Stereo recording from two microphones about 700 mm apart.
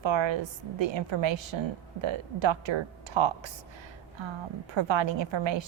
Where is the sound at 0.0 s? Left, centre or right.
Right.